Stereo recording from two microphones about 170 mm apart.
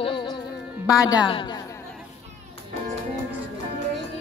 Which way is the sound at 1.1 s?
30° left (ahead or behind).